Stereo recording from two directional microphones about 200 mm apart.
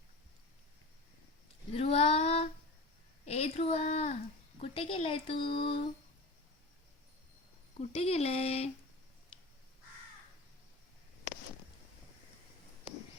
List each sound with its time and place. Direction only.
1.7 s female singing: 30° left (ahead or behind)
3.2 s a sound: 30° left (ahead or behind)
4.6 s speech: 30° left (ahead or behind)
7.8 s speech: 30° left (ahead or behind)